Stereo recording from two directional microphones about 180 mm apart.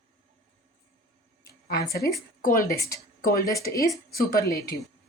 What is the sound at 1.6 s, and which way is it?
Speech, 60° left (ahead or behind).